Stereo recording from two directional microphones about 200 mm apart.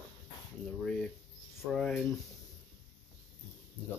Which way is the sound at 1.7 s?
Centre (ahead or behind).